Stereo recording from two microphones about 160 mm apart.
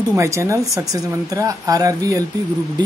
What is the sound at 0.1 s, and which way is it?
Speech, 20° right (ahead or behind).